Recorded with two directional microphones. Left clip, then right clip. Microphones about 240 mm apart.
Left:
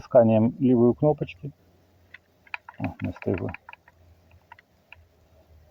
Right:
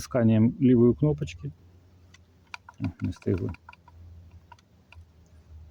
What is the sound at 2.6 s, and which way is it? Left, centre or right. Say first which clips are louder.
Speech: even; right.